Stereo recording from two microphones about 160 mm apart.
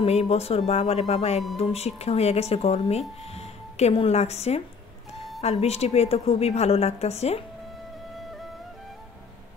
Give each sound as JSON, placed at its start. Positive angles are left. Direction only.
{"t": 0.0, "sound": "speech", "side_deg": 40}